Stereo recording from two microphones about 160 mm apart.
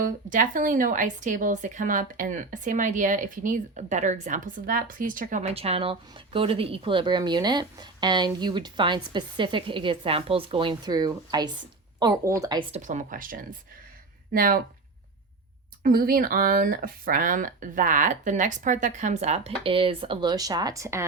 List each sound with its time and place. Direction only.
0.0 s a woman's voice: 55° right (ahead or behind); by 12.6 s 20° right (ahead or behind)
12.7 s speech: 50° right (ahead or behind)
15.8 s speech: 65° right (ahead or behind); by 21.0 s 20° right (ahead or behind)